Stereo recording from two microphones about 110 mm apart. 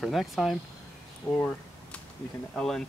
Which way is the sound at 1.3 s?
15° left (ahead or behind).